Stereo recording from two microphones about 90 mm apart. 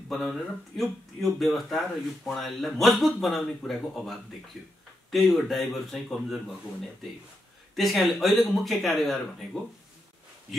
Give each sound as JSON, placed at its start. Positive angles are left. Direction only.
{"t": 0.1, "sound": "speech", "side_deg": 0}
{"t": 7.7, "sound": "speech", "side_deg": 0}